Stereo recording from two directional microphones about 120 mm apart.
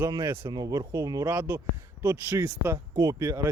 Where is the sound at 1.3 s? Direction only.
15° right (ahead or behind).